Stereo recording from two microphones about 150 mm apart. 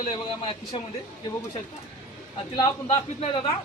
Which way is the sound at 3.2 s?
40° left (ahead or behind).